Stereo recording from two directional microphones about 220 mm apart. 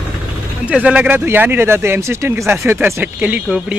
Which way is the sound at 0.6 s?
5° right (ahead or behind).